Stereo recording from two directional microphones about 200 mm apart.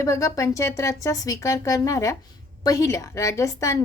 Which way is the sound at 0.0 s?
15° left (ahead or behind).